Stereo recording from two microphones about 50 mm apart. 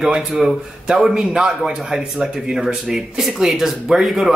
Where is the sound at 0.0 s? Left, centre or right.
Centre.